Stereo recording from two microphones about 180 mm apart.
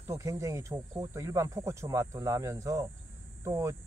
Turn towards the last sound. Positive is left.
turn(degrees=-15)  # may be behind; listen again after turning